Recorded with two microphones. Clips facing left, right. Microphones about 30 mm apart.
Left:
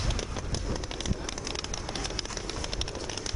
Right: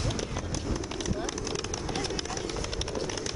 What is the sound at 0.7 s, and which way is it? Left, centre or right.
Vehicle, centre.